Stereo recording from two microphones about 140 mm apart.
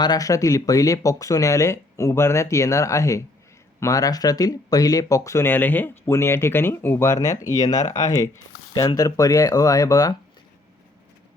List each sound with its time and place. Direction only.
0.0 s speech: 25° left (ahead or behind)